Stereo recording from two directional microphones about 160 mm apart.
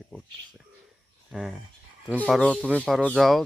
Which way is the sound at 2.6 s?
10° right (ahead or behind).